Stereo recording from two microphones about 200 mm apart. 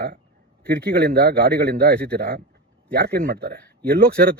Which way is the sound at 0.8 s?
50° right (ahead or behind).